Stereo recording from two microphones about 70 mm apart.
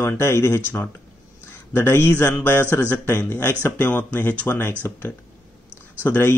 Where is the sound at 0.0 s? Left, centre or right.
Left.